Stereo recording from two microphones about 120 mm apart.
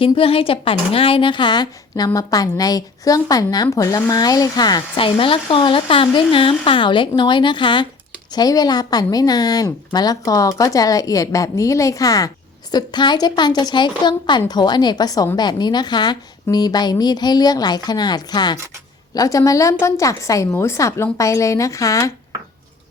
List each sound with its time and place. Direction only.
0.0 s a woman's voice: 50° left (ahead or behind); by 4.8 s 35° left (ahead or behind)
4.9 s a woman's voice: 50° left (ahead or behind); by 22.1 s 25° left (ahead or behind)